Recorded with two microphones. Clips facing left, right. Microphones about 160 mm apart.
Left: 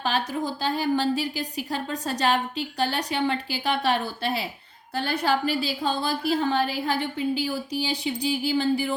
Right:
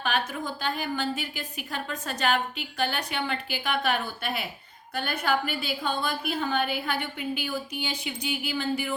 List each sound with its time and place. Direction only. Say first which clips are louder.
0.0 s a woman's voice: left 3 dB; 35° left (ahead or behind)